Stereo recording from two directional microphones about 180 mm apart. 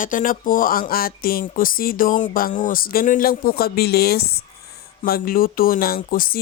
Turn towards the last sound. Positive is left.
turn(degrees=55)  # may be behind; listen again after turning